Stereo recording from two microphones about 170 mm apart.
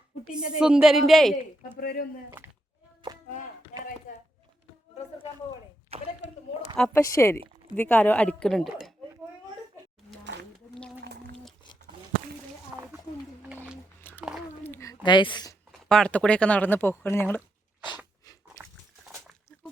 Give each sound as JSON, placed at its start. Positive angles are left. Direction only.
{"t": 0.3, "sound": "a woman's voice", "side_deg": -5}
{"t": 1.8, "sound": "speech", "side_deg": 65}
{"t": 5.9, "sound": "speech", "side_deg": -35}
{"t": 6.7, "sound": "speech", "side_deg": 5}
{"t": 7.0, "sound": "speech", "side_deg": 15}
{"t": 14.0, "sound": "a sound", "side_deg": 10}
{"t": 15.0, "sound": "speech", "side_deg": 25}
{"t": 15.9, "sound": "speech", "side_deg": 5}